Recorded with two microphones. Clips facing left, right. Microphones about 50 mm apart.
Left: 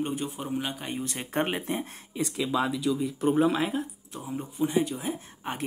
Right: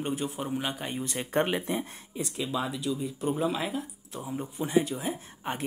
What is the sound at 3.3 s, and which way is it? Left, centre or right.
Speech, left.